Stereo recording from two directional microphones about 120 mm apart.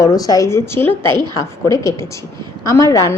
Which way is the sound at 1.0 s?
40° right (ahead or behind).